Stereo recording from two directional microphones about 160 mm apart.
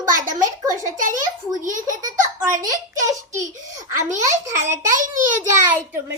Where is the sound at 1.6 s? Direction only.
55° right (ahead or behind).